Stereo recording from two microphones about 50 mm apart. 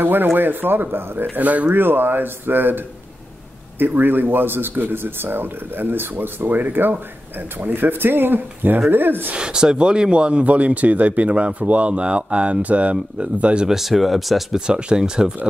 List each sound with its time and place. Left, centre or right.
0.0 s speech: right
1.3 s speech: right
1.8 s speech: right
3.8 s speech: right
9.3 s speech: centre
13.7 s speech: centre
14.7 s speech: centre